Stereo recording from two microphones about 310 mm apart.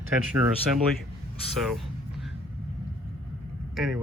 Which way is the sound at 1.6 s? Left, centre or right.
Centre.